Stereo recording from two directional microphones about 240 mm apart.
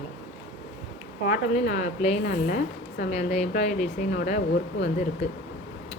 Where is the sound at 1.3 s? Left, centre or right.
Left.